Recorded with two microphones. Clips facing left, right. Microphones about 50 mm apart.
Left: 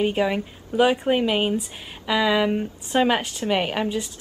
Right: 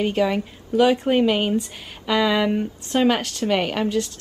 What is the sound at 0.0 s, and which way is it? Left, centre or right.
Speech, centre.